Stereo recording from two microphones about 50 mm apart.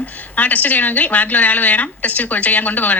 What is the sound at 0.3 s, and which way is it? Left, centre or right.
A woman's voice, left.